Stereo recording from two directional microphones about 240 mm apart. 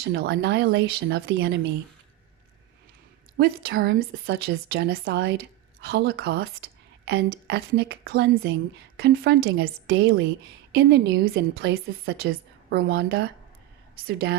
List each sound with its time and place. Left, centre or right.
0.0 s speech: right
3.3 s a woman's voice: right
9.5 s speech: right